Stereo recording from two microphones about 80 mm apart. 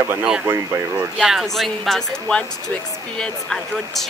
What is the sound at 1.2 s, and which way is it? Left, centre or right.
Speech, centre.